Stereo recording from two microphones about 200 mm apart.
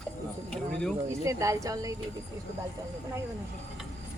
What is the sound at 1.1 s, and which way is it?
Speech, 15° right (ahead or behind).